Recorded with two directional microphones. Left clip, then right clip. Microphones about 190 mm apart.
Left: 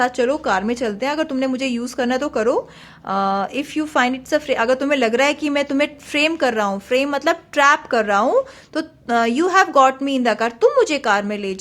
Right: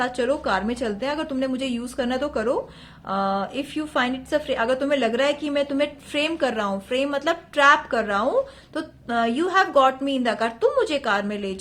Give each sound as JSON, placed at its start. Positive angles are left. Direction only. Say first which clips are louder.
{"t": 0.0, "sound": "a woman's voice", "louder": "left 5 dB", "side_deg": 25}